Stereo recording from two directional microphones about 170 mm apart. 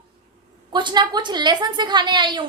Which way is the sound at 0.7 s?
25° right (ahead or behind).